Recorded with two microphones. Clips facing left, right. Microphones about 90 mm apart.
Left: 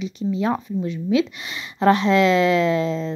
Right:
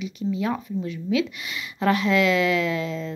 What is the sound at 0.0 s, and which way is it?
A woman's voice, 30° left (ahead or behind).